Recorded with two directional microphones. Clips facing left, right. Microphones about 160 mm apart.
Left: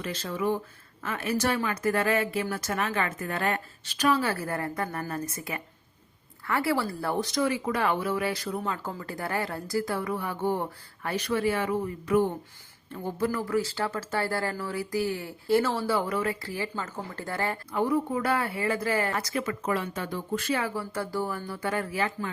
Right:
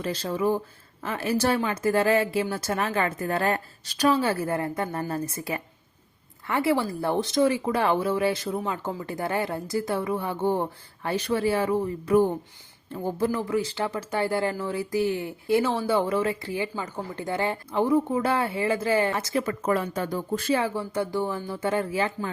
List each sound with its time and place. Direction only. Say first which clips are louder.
0.0 s speech: right 4 dB; 30° right (ahead or behind)
6.5 s speech: right 3 dB; 20° right (ahead or behind)